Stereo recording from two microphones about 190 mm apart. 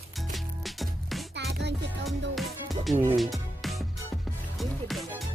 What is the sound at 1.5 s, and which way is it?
Music, 65° right (ahead or behind).